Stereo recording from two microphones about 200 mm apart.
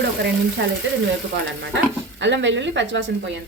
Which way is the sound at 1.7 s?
65° right (ahead or behind).